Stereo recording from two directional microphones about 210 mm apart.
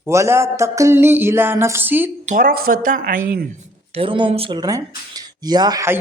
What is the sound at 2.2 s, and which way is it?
Speech, 40° right (ahead or behind).